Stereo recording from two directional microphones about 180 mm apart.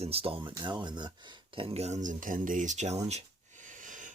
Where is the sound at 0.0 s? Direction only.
35° right (ahead or behind).